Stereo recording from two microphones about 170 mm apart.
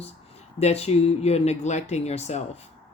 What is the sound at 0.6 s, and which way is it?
Speech, 40° left (ahead or behind).